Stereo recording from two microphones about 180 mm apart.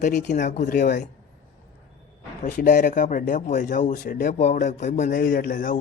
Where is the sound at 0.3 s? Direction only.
45° left (ahead or behind).